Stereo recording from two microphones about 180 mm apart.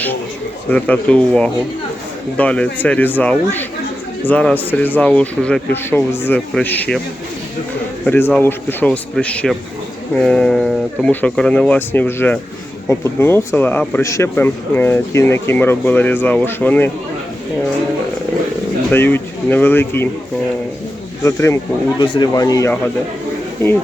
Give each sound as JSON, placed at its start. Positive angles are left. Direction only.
{"t": 0.7, "sound": "speech", "side_deg": 5}
{"t": 8.0, "sound": "speech", "side_deg": 10}
{"t": 18.9, "sound": "speech", "side_deg": 10}
{"t": 21.2, "sound": "speech", "side_deg": 15}